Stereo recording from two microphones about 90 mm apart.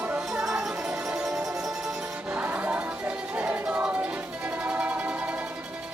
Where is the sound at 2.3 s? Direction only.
15° right (ahead or behind).